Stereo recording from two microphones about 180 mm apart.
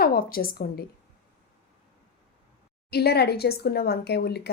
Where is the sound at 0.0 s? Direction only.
55° left (ahead or behind).